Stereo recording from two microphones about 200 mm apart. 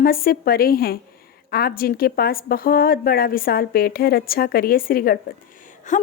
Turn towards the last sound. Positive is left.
turn(degrees=40)  # may be behind; listen again after turning